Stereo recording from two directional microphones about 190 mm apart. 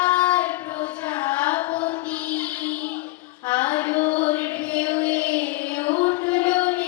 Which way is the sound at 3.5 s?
10° left (ahead or behind).